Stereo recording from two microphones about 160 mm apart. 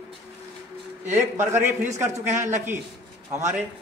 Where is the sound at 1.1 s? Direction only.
15° right (ahead or behind).